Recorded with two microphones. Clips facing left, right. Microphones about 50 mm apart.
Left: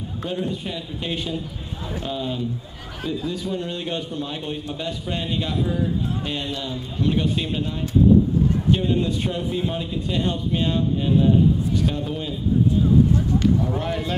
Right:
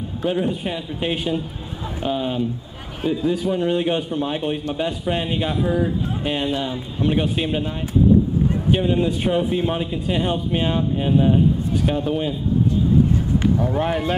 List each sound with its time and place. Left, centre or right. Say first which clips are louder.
0.3 s a man's voice: right 5 dB; right
8.7 s a man's voice: right 2 dB; centre
13.7 s a man's voice: right 4 dB; right